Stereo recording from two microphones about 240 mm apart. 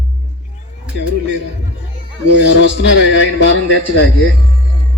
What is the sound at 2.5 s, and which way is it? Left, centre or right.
Speech, left.